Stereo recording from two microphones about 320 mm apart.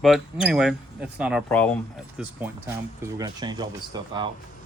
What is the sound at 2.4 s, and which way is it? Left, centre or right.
Speech, centre.